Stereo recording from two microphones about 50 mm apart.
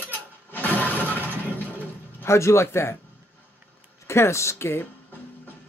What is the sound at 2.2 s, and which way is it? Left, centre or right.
Speech, left.